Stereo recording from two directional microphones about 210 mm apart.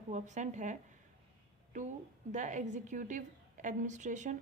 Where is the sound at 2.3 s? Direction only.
35° right (ahead or behind).